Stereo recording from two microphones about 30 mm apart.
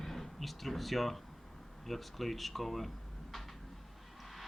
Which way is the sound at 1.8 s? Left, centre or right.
Centre.